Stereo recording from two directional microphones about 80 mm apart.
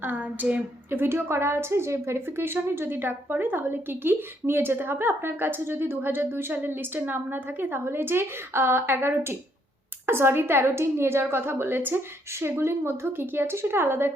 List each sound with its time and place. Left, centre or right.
0.0 s speech: right
0.9 s a woman's voice: right